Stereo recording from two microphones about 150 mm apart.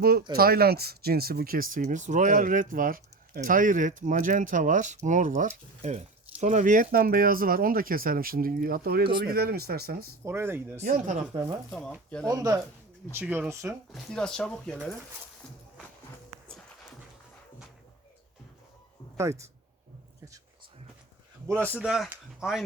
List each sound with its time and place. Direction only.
0.0 s speech: 90° right
10.2 s speech: 15° right (ahead or behind)
10.8 s speech: 60° right (ahead or behind)
12.2 s speech: 25° right (ahead or behind)
13.1 s speech: 10° right (ahead or behind)
13.9 s speech: 5° left (ahead or behind)
19.1 s speech: 20° right (ahead or behind)
21.4 s speech: 20° right (ahead or behind)
21.8 s speech: 5° right (ahead or behind)